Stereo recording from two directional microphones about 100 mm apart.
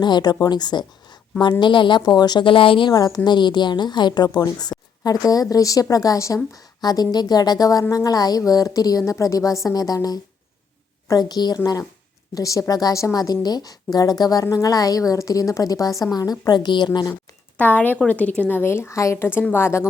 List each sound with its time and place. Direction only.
0.0 s a woman's voice: 45° left (ahead or behind)
2.9 s a woman's voice: 40° left (ahead or behind)
17.6 s a woman's voice: 15° left (ahead or behind)